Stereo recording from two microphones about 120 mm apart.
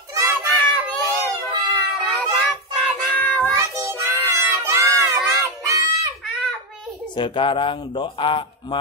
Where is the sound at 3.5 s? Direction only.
25° right (ahead or behind).